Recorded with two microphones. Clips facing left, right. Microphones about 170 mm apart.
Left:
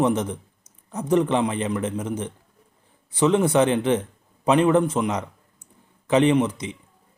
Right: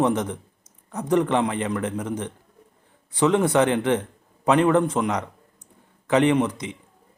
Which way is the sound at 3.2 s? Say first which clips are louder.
Left 1 dB; 20° left (ahead or behind).